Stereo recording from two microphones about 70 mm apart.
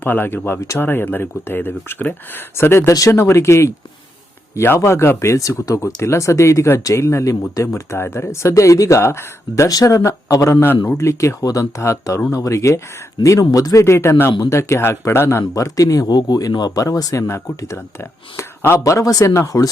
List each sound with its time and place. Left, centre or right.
0.0 s speech: left
2.9 s speech: left
3.2 s speech: left
9.6 s speech: left
11.4 s speech: left
11.8 s speech: left
13.4 s speech: left
17.2 s speech: left
18.8 s speech: left